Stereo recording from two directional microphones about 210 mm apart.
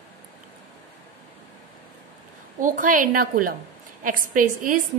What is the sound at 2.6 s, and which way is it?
A woman's voice, 40° right (ahead or behind).